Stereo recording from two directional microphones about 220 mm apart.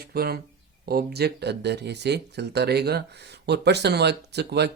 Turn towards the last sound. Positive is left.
turn(degrees=-50)  # may be behind; listen again after turning